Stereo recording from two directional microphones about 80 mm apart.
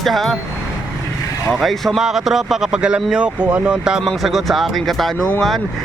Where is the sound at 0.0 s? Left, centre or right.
Centre.